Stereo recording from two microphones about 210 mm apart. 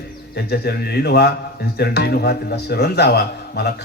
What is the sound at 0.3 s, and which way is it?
A man's voice, 50° left (ahead or behind).